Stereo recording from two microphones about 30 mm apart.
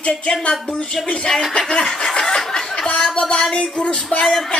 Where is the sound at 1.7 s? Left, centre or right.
Left.